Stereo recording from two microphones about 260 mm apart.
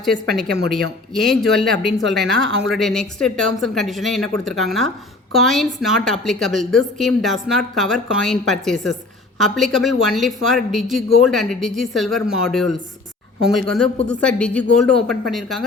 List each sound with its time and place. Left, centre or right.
0.7 s a woman's voice: centre
2.2 s speech: right
2.6 s a woman's voice: centre